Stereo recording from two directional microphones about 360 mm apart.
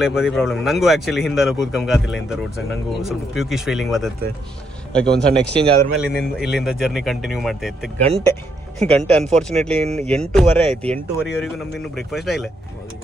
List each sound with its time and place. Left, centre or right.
0.0 s speech: centre